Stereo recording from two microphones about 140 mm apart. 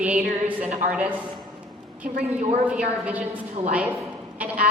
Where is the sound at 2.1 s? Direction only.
55° right (ahead or behind).